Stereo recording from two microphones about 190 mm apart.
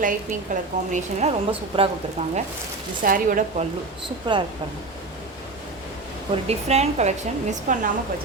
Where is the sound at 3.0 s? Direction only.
45° right (ahead or behind).